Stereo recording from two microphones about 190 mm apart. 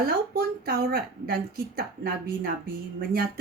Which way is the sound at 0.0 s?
55° right (ahead or behind).